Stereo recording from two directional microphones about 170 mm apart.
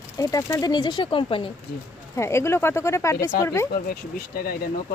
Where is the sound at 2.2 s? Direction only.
15° left (ahead or behind).